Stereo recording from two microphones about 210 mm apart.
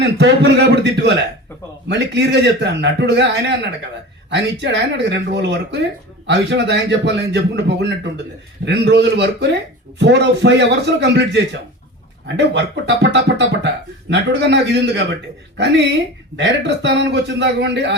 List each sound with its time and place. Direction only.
0.0 s a man's voice: 55° right (ahead or behind)
16.4 s a man's voice: 55° right (ahead or behind)